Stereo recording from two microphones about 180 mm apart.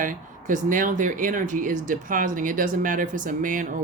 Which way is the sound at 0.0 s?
45° right (ahead or behind).